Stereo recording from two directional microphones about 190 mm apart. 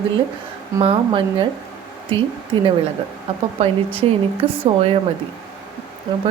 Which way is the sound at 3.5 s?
30° right (ahead or behind).